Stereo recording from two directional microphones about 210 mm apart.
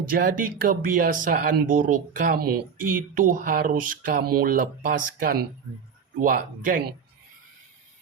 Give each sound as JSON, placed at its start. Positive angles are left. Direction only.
{"t": 0.0, "sound": "speech", "side_deg": -40}